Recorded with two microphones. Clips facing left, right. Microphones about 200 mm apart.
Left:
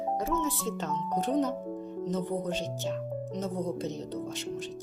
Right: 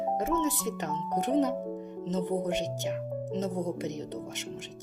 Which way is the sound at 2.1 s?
20° right (ahead or behind).